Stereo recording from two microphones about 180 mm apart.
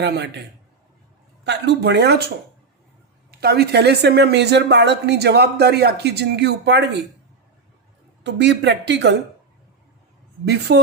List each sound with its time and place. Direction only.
0.0 s speech: 70° right (ahead or behind)
1.5 s speech: 70° right (ahead or behind)
3.3 s speech: 65° right (ahead or behind)
8.2 s speech: 70° right (ahead or behind)
10.4 s speech: 65° right (ahead or behind)